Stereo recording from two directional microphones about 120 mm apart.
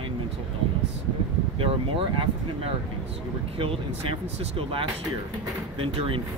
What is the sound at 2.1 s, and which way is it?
Speech, 45° right (ahead or behind).